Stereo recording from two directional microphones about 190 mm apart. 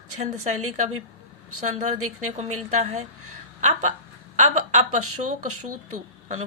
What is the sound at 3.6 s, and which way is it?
A woman's voice, 40° right (ahead or behind).